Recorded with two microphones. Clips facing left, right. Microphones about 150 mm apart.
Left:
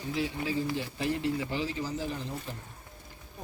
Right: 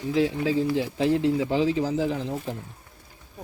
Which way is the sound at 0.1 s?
90° right.